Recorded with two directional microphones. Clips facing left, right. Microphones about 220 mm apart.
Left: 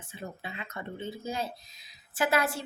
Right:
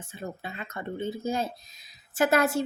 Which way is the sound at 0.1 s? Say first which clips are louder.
Right 3 dB; 45° right (ahead or behind).